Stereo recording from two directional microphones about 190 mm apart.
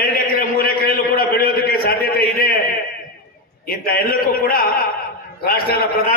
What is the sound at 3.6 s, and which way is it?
A man's voice, 50° left (ahead or behind).